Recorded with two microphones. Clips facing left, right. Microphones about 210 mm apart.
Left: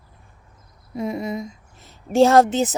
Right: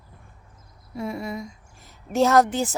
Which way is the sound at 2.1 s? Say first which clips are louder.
Left 4 dB; 30° left (ahead or behind).